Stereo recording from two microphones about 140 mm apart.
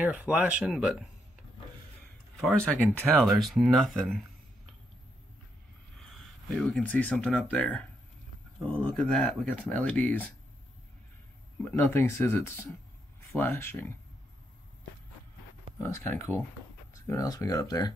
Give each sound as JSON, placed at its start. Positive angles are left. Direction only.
{"t": 0.0, "sound": "speech", "side_deg": -10}
{"t": 2.4, "sound": "speech", "side_deg": 5}
{"t": 3.3, "sound": "speech", "side_deg": 0}
{"t": 5.9, "sound": "speech", "side_deg": 5}
{"t": 11.7, "sound": "speech", "side_deg": 15}
{"t": 15.8, "sound": "speech", "side_deg": 20}